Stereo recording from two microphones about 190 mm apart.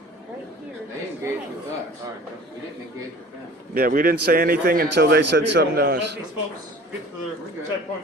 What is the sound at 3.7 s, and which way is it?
A man's voice, 50° right (ahead or behind).